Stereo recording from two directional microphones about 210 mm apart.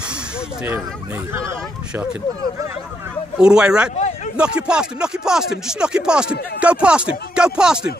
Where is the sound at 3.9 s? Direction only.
35° left (ahead or behind).